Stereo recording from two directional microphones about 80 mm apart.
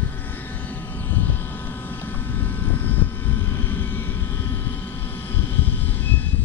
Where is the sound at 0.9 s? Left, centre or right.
Left.